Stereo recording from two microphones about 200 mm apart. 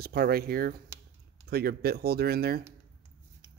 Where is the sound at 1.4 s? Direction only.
50° right (ahead or behind).